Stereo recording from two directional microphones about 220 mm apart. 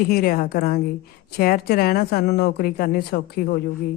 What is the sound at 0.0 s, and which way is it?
Speech, 45° left (ahead or behind).